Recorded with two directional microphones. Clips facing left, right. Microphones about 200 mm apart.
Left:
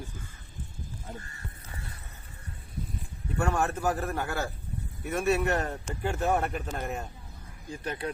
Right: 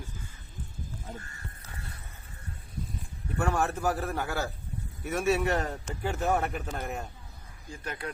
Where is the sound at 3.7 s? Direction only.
Centre (ahead or behind).